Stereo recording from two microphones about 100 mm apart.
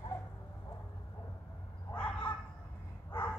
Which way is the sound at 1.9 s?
15° left (ahead or behind).